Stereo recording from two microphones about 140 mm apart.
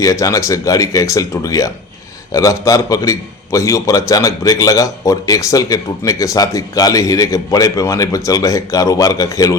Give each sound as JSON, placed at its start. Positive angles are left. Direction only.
{"t": 0.0, "sound": "a man's voice", "side_deg": 25}